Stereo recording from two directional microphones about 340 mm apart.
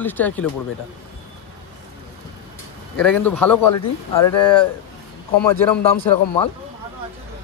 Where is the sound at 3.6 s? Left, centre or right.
Left.